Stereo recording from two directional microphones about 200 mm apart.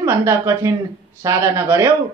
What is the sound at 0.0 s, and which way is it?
Speech, 15° right (ahead or behind).